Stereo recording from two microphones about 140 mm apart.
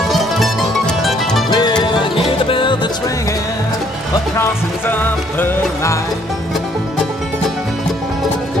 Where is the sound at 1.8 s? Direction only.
35° left (ahead or behind).